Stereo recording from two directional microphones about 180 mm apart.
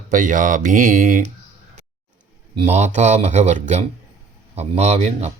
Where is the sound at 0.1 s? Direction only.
45° right (ahead or behind).